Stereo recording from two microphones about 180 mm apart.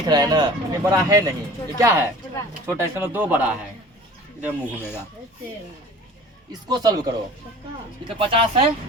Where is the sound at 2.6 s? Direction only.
10° right (ahead or behind).